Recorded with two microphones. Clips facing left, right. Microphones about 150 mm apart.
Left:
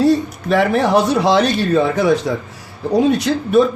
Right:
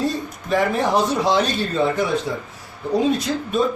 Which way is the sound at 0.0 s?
70° left (ahead or behind).